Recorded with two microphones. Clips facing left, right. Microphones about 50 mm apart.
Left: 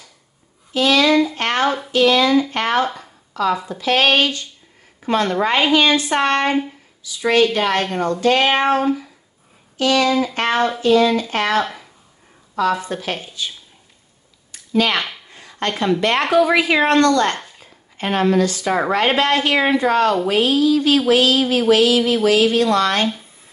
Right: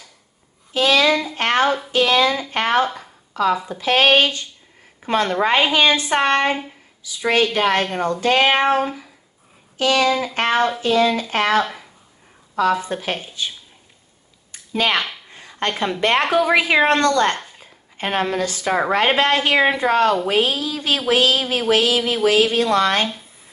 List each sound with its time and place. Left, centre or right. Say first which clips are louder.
0.7 s a woman's voice: left 2 dB; right
2.8 s speech: even; centre
3.6 s a woman's voice: even; right
9.8 s a woman's voice: left 1 dB; right
11.6 s speech: left 1 dB; centre
12.5 s a woman's voice: even; right
14.5 s a sound: left 2 dB; right
16.0 s a woman's voice: right 4 dB; right
16.3 s speech: left 2 dB; centre
16.5 s a woman's voice: left 1 dB; right